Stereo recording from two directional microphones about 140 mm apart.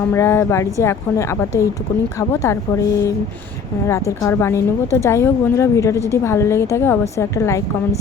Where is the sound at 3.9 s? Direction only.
20° left (ahead or behind).